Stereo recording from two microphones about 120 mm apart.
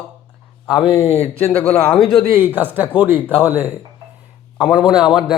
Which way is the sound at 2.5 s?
15° right (ahead or behind).